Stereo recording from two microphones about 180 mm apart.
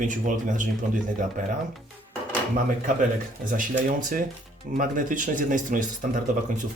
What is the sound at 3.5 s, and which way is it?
Speech, 50° right (ahead or behind).